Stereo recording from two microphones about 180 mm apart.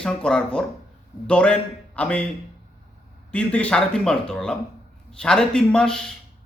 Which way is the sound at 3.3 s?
5° left (ahead or behind).